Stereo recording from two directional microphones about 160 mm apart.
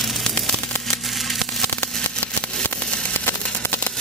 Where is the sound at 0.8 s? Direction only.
Centre (ahead or behind).